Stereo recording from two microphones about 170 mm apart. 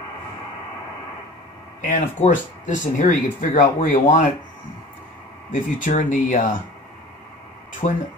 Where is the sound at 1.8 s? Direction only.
45° left (ahead or behind).